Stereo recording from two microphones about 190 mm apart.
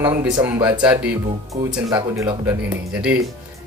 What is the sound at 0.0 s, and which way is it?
Speech, 15° right (ahead or behind).